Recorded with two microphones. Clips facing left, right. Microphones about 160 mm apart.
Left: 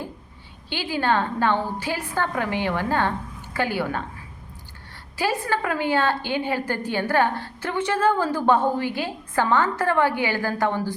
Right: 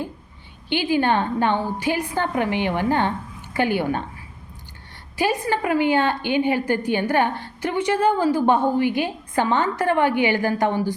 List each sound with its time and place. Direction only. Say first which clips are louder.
0.7 s a woman's voice: right 4 dB; 20° right (ahead or behind)
5.1 s a woman's voice: right 2 dB; 20° right (ahead or behind)